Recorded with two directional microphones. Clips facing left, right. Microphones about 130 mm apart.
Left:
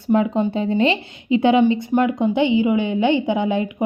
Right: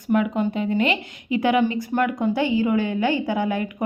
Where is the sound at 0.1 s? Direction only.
25° left (ahead or behind).